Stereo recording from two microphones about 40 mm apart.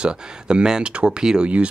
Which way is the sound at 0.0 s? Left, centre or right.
Right.